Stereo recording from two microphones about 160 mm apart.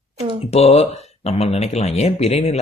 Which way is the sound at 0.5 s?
40° left (ahead or behind).